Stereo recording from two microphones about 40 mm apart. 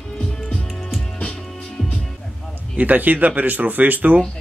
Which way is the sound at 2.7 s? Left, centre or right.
Right.